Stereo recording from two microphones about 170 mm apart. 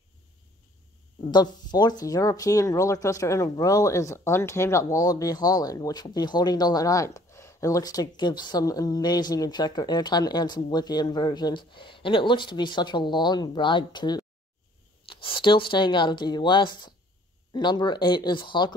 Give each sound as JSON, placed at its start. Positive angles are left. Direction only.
{"t": 1.3, "sound": "speech", "side_deg": 25}